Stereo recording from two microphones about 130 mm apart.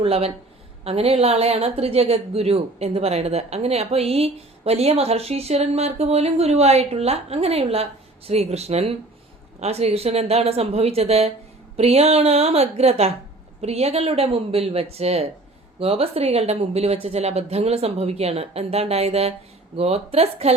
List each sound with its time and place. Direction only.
0.0 s a woman's voice: 50° right (ahead or behind)